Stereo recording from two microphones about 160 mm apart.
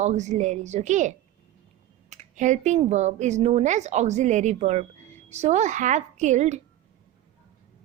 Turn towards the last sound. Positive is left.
turn(degrees=-45)  # may be behind; listen again after turning